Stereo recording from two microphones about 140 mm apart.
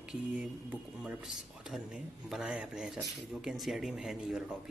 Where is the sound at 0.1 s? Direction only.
10° right (ahead or behind).